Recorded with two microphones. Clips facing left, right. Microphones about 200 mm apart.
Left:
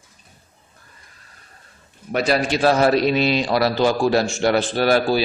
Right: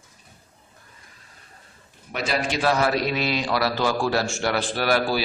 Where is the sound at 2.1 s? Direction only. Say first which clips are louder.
Left 6 dB; 35° left (ahead or behind).